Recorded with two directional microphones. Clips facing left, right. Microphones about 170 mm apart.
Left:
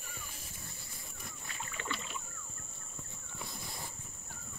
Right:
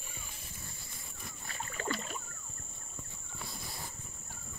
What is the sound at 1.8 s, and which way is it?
Rowboat, 40° right (ahead or behind).